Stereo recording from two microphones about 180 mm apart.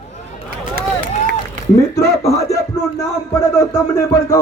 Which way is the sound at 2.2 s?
20° left (ahead or behind).